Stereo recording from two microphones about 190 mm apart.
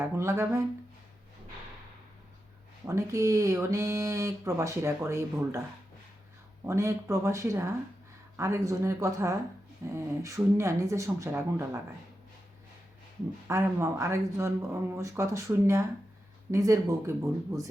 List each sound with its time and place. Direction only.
0.0 s speech: 15° right (ahead or behind)
2.8 s speech: 15° right (ahead or behind)
6.7 s speech: 15° right (ahead or behind)
13.5 s speech: 15° right (ahead or behind)